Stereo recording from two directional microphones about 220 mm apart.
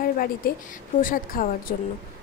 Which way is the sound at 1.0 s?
40° left (ahead or behind).